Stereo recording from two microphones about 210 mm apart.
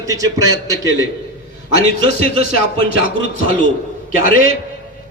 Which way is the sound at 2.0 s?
45° left (ahead or behind).